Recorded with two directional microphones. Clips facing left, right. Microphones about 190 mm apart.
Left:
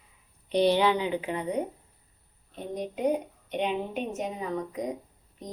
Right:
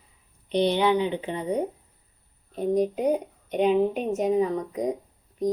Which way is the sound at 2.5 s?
40° right (ahead or behind).